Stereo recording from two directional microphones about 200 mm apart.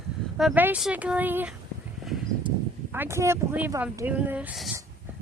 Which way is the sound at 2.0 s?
Centre (ahead or behind).